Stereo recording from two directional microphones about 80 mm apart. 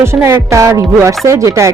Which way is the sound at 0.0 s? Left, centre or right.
Right.